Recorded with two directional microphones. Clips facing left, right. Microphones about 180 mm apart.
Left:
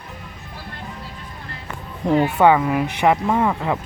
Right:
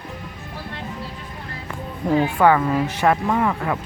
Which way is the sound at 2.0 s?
20° left (ahead or behind).